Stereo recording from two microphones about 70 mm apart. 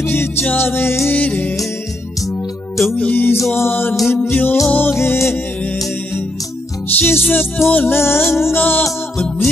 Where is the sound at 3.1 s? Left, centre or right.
Left.